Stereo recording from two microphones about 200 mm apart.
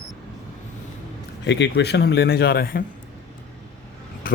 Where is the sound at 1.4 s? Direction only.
60° left (ahead or behind).